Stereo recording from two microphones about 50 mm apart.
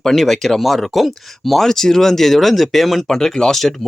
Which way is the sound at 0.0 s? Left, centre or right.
Centre.